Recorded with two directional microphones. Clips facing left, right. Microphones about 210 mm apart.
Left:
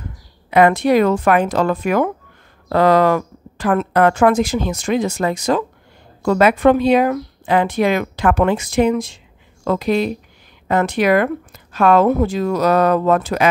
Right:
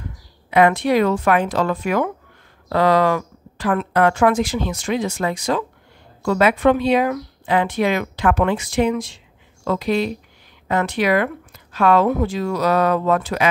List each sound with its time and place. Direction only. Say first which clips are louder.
0.5 s speech: left 3 dB; 45° left (ahead or behind)